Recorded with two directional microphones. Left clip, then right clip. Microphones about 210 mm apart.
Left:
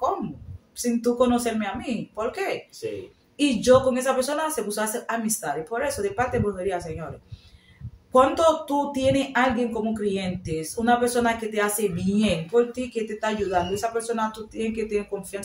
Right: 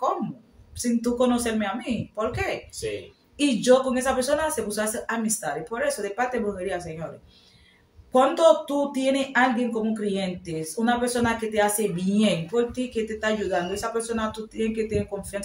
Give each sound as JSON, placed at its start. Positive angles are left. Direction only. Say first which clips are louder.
{"t": 0.8, "sound": "speech", "louder": "left 1 dB", "side_deg": 0}
{"t": 8.1, "sound": "speech", "louder": "right 1 dB", "side_deg": 5}